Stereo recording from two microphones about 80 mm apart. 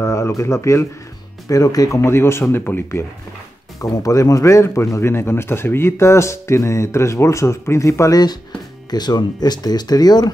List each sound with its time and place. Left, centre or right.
0.0 s speech: left
1.5 s speech: left
2.0 s speech: left
3.8 s speech: left
8.9 s speech: left